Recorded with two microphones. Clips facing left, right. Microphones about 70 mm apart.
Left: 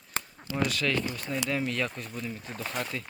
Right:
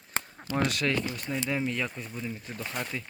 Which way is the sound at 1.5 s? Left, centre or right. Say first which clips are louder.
Even; centre.